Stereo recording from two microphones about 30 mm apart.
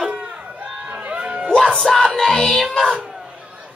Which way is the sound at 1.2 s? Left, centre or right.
Right.